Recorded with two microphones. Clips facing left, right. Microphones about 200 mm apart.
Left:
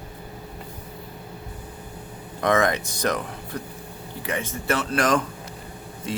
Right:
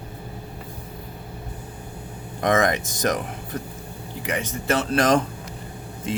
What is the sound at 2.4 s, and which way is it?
Speech, 20° right (ahead or behind).